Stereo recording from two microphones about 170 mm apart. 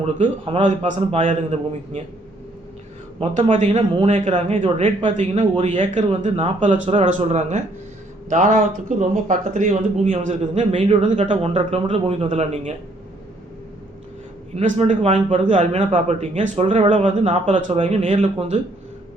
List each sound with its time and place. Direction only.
0.6 s speech: 45° right (ahead or behind)
3.2 s speech: 30° right (ahead or behind)
5.1 s speech: 40° right (ahead or behind)
14.5 s speech: 45° right (ahead or behind)
17.4 s speech: 45° right (ahead or behind)
17.7 s speech: 35° right (ahead or behind)